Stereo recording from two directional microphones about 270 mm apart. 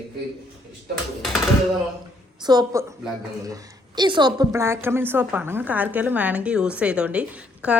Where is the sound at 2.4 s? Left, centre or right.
Centre.